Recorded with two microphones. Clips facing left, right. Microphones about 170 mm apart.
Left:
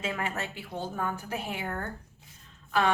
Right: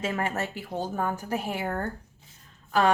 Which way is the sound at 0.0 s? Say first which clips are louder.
Right 4 dB; 45° right (ahead or behind).